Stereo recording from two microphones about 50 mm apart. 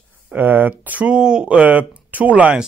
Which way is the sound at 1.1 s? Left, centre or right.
Centre.